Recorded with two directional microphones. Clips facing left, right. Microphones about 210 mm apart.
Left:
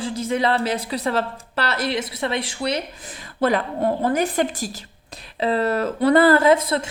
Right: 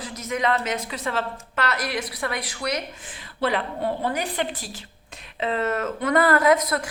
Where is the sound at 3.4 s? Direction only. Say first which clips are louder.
Left 5 dB; 45° left (ahead or behind).